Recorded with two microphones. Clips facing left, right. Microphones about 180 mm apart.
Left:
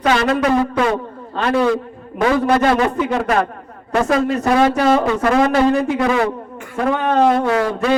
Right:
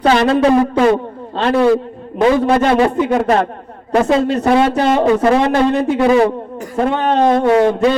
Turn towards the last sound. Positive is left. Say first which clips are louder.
# right 3 dB
turn(degrees=-25)  # may be behind; listen again after turning